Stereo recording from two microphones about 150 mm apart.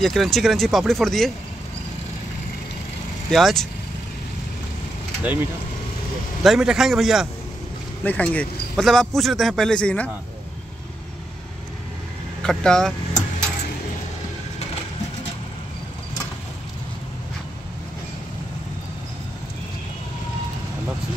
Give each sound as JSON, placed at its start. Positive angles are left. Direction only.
{"t": 0.0, "sound": "speech", "side_deg": 0}
{"t": 3.3, "sound": "speech", "side_deg": 0}
{"t": 6.4, "sound": "speech", "side_deg": -5}
{"t": 8.0, "sound": "a man's voice", "side_deg": 10}
{"t": 12.4, "sound": "speech", "side_deg": 5}